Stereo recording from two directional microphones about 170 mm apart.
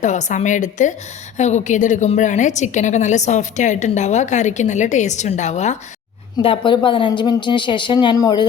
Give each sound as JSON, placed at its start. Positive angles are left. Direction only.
{"t": 0.0, "sound": "a woman's voice", "side_deg": 45}
{"t": 6.4, "sound": "a woman's voice", "side_deg": 30}